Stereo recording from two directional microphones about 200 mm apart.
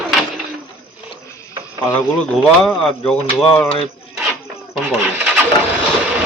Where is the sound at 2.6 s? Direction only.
5° left (ahead or behind).